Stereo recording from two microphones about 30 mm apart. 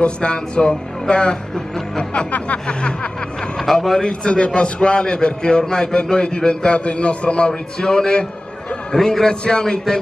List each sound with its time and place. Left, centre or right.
0.0 s a man's voice: left
2.3 s speech: left
3.7 s a man's voice: centre
4.0 s a man's voice: left
7.8 s a man's voice: left
8.9 s a man's voice: centre
9.3 s a man's voice: left